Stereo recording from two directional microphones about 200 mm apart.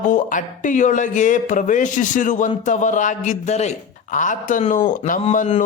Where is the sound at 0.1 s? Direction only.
40° left (ahead or behind).